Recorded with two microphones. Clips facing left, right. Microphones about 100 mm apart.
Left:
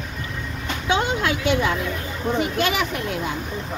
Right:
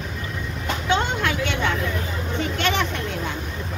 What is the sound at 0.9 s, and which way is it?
A woman's voice, 20° left (ahead or behind).